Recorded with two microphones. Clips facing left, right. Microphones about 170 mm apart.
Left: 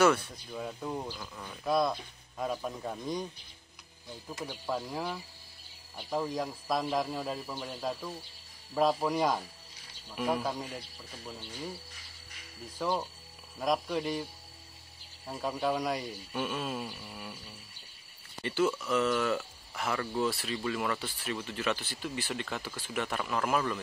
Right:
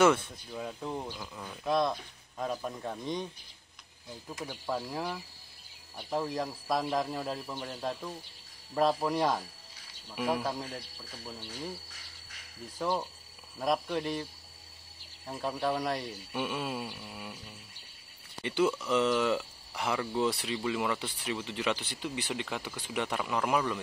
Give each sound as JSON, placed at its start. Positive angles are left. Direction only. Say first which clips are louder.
{"t": 0.0, "sound": "speech", "louder": "right 1 dB", "side_deg": -20}
{"t": 0.5, "sound": "speech", "louder": "even", "side_deg": 0}
{"t": 4.4, "sound": "speech", "louder": "even", "side_deg": -5}
{"t": 12.7, "sound": "speech", "louder": "even", "side_deg": -5}
{"t": 15.2, "sound": "speech", "louder": "even", "side_deg": 0}
{"t": 18.4, "sound": "speech", "louder": "right 1 dB", "side_deg": -15}